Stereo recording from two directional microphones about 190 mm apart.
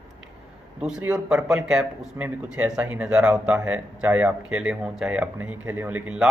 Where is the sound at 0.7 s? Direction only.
5° right (ahead or behind).